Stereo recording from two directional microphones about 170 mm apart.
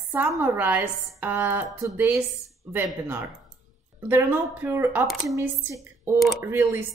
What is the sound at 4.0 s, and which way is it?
A woman's voice, 10° right (ahead or behind).